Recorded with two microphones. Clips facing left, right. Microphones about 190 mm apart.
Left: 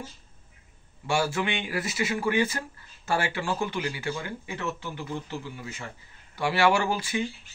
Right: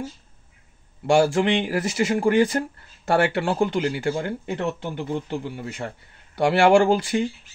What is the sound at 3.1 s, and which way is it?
A man's voice, 65° right (ahead or behind).